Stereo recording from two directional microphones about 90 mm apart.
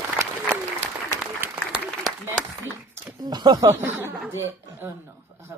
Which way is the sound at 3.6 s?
25° right (ahead or behind).